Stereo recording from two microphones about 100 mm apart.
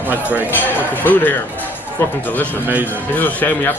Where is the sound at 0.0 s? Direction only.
15° right (ahead or behind).